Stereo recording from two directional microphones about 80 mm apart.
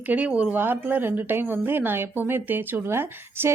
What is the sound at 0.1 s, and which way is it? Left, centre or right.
Speech, centre.